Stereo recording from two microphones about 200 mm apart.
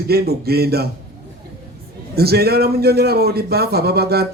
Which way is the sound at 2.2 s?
50° right (ahead or behind).